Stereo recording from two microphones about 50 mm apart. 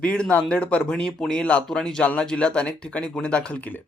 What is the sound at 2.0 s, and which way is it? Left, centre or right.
Speech, left.